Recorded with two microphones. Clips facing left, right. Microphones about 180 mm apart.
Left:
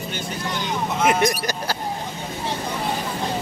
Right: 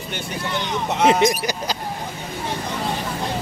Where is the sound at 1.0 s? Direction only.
25° right (ahead or behind).